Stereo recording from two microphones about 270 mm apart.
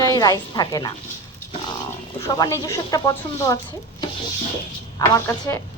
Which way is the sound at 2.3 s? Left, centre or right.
Centre.